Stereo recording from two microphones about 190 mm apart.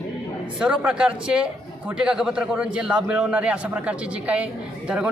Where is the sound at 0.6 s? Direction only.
5° right (ahead or behind).